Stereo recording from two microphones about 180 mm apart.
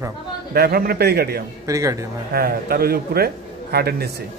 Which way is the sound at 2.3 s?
55° right (ahead or behind).